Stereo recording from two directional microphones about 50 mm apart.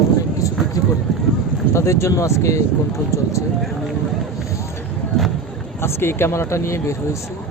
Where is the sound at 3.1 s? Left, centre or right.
Left.